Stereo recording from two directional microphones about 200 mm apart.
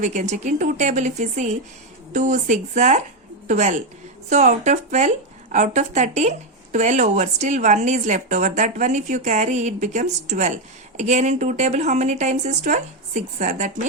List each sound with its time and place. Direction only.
0.0 s a woman's voice: 35° right (ahead or behind)